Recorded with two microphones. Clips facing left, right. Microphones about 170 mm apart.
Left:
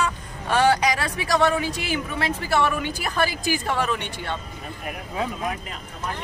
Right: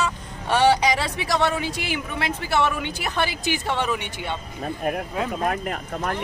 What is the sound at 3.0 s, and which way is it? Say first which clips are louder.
Speech: left 1 dB; 20° right (ahead or behind).